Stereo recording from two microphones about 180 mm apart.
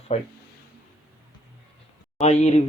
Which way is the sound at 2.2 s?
40° left (ahead or behind).